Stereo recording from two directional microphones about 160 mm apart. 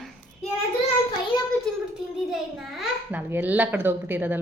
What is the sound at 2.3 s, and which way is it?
A child's voice, 5° right (ahead or behind).